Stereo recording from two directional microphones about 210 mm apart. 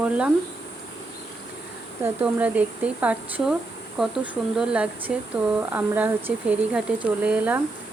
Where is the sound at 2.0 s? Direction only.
5° right (ahead or behind).